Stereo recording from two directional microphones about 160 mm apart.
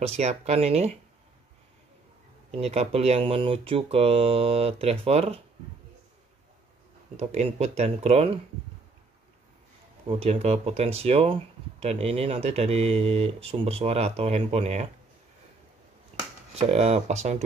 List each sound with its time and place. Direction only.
0.0 s speech: 45° right (ahead or behind)
2.5 s speech: 40° right (ahead or behind)
7.2 s speech: 40° right (ahead or behind)
10.0 s speech: 40° right (ahead or behind)
16.5 s speech: 40° right (ahead or behind)